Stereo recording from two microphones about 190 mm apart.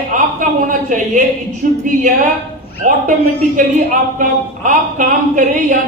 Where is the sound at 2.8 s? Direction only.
40° right (ahead or behind).